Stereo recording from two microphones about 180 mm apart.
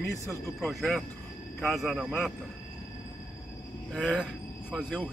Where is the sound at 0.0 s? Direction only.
15° left (ahead or behind).